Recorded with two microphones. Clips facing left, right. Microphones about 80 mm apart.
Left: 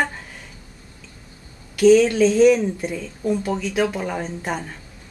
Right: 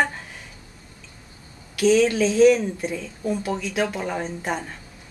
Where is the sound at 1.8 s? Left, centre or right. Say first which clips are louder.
Left 5 dB; centre.